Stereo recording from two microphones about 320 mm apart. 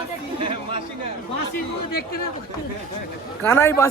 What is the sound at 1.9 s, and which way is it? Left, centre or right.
Speech, left.